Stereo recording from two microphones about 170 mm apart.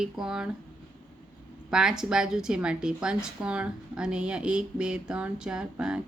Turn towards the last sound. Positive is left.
turn(degrees=-5)  # may be behind; listen again after turning